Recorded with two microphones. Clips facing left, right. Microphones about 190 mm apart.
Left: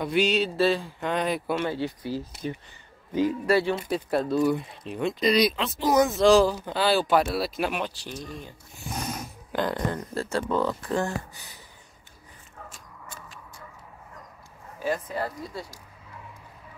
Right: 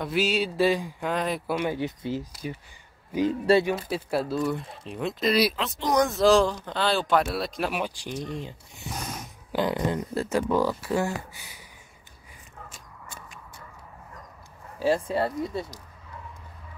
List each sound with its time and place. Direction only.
0.0 s speech: 5° right (ahead or behind)
1.0 s speech: centre (ahead or behind)
1.6 s speech: 15° right (ahead or behind)
3.3 s speech: 25° right (ahead or behind)
3.9 s speech: 5° right (ahead or behind)
7.8 s speech: 15° right (ahead or behind)
9.5 s speech: 10° right (ahead or behind)
14.8 s speech: 30° right (ahead or behind)